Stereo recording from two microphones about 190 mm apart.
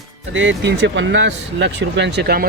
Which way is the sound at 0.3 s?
75° right (ahead or behind).